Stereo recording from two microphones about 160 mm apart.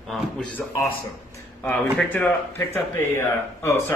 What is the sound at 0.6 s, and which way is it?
Speech, 5° left (ahead or behind).